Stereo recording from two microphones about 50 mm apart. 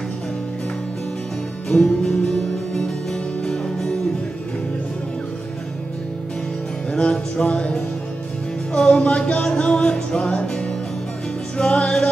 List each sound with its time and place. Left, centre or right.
1.7 s music: left
2.2 s music: centre
6.9 s music: centre
8.7 s music: centre
9.0 s music: left